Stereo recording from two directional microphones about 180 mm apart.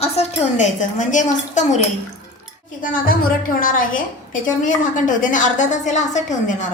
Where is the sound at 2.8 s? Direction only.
50° left (ahead or behind).